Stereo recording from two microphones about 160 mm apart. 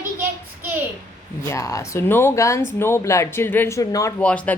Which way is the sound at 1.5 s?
20° left (ahead or behind).